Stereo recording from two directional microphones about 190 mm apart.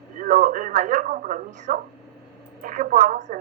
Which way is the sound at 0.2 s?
45° right (ahead or behind).